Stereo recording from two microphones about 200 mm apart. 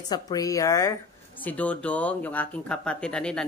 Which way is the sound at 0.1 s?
20° left (ahead or behind).